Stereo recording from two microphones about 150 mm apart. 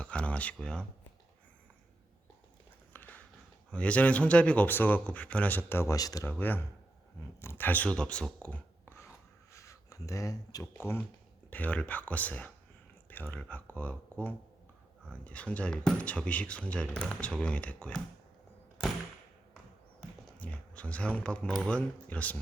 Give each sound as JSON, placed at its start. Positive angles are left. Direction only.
{"t": 0.0, "sound": "speech", "side_deg": 10}
{"t": 2.9, "sound": "a sound", "side_deg": 10}
{"t": 3.7, "sound": "speech", "side_deg": 10}
{"t": 6.4, "sound": "speech", "side_deg": 10}
{"t": 20.4, "sound": "speech", "side_deg": 10}